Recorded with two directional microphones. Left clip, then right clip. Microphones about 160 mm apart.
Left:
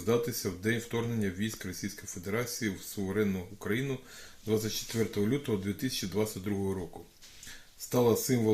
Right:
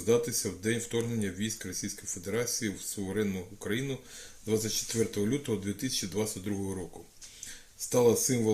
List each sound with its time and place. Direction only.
0.0 s speech: 35° left (ahead or behind)
7.9 s speech: 35° left (ahead or behind)